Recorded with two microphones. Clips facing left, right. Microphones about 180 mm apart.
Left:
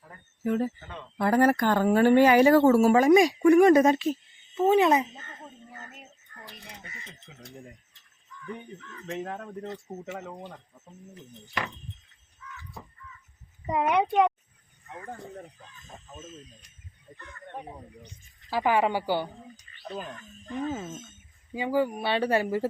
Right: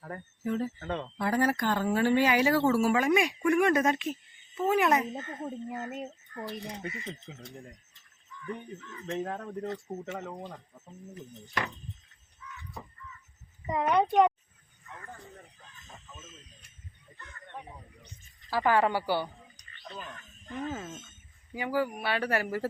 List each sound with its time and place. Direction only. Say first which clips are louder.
0.4 s speech: left 4 dB; 55° left (ahead or behind)
0.8 s speech: right 8 dB; 65° right (ahead or behind)
1.2 s speech: left 6 dB; 55° left (ahead or behind); by 5.0 s 25° left (ahead or behind)
8.4 s speech: right 1 dB; 10° right (ahead or behind)
9.3 s a woman's voice: right 1 dB; centre (ahead or behind)
13.7 s a woman's voice: left 1 dB; 15° left (ahead or behind)
14.1 s speech: even; centre (ahead or behind)
15.0 s speech: left 10 dB; 40° left (ahead or behind)
17.5 s speech: left 5 dB; 45° left (ahead or behind)
18.5 s a woman's voice: left 1 dB; 15° left (ahead or behind)
19.8 s speech: left 6 dB; 40° left (ahead or behind)
21.5 s speech: left 4 dB; 20° left (ahead or behind)